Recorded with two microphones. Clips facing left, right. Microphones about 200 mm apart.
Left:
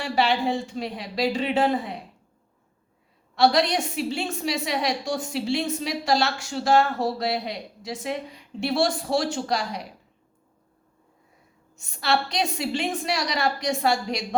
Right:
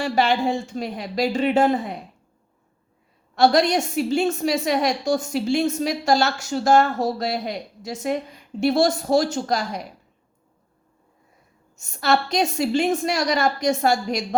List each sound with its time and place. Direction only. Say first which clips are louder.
0.0 s a woman's voice: right 3 dB; 45° right (ahead or behind)
3.3 s a woman's voice: right 3 dB; 45° right (ahead or behind)
11.8 s a woman's voice: right 4 dB; 45° right (ahead or behind)